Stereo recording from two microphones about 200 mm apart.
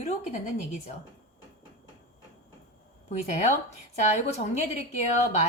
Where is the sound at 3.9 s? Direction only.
35° left (ahead or behind).